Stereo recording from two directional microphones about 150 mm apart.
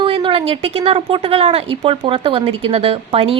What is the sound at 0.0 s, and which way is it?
A woman's voice, 35° right (ahead or behind).